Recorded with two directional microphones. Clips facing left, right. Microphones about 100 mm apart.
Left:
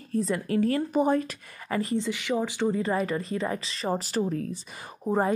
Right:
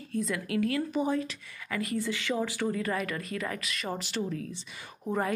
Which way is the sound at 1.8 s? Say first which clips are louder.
Left 3 dB; 30° left (ahead or behind).